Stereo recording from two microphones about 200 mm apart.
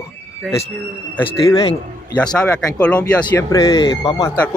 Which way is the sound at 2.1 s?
5° left (ahead or behind).